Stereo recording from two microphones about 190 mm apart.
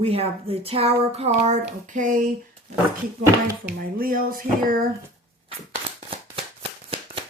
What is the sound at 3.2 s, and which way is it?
Speech, 10° right (ahead or behind).